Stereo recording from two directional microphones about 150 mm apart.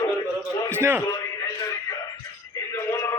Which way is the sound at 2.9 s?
20° left (ahead or behind).